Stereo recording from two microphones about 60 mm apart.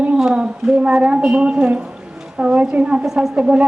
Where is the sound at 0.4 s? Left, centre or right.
Centre.